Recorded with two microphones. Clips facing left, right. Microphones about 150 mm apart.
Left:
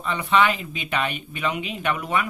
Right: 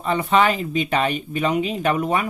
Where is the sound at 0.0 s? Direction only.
40° right (ahead or behind).